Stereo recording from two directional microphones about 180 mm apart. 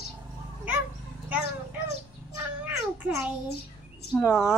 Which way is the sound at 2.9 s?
10° right (ahead or behind).